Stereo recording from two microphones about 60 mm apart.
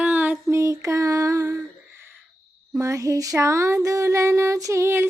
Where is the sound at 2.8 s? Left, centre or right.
Right.